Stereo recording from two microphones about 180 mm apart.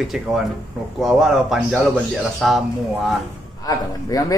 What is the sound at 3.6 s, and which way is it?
Speech, 20° left (ahead or behind).